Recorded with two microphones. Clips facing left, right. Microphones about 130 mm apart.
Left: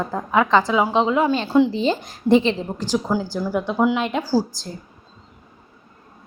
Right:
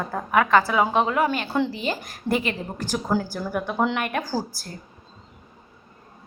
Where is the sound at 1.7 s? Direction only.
25° left (ahead or behind).